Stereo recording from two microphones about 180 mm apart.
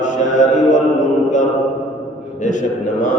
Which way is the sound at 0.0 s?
45° left (ahead or behind).